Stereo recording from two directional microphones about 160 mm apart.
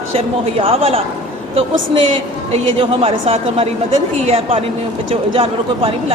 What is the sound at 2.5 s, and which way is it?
A man's voice, 35° right (ahead or behind).